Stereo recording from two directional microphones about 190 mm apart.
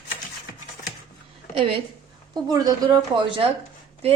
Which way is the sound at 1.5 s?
30° right (ahead or behind).